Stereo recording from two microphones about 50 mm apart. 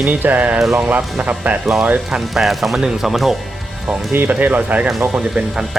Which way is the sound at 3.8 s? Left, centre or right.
Right.